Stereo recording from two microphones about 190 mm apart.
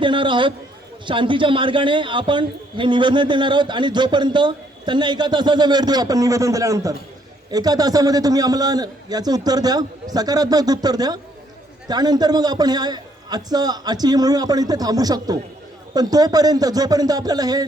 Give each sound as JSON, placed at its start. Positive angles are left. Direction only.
{"t": 0.0, "sound": "a man's voice", "side_deg": -25}